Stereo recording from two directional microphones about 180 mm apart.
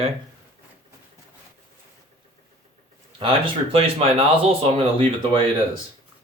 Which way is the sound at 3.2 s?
30° right (ahead or behind).